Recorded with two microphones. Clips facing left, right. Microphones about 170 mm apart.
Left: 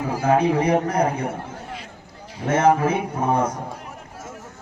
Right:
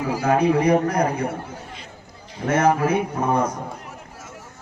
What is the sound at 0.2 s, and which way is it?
Speech, 25° left (ahead or behind).